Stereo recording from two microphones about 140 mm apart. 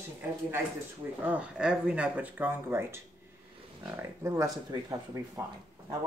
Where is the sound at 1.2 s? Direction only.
10° right (ahead or behind); by 5.4 s 25° right (ahead or behind).